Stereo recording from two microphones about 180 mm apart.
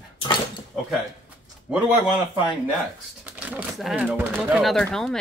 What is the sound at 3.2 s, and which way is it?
Speech, 10° right (ahead or behind).